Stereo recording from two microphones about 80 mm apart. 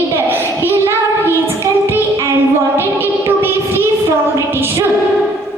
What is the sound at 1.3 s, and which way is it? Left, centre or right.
Child singing, right.